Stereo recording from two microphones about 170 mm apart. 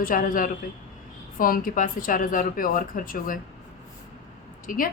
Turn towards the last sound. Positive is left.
turn(degrees=55)  # may be behind; listen again after turning